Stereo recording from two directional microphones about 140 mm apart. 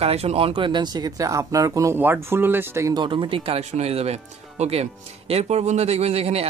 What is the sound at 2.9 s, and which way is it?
Speech, 35° right (ahead or behind).